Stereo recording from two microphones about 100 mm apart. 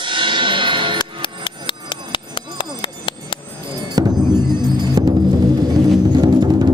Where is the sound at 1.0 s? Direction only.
50° left (ahead or behind).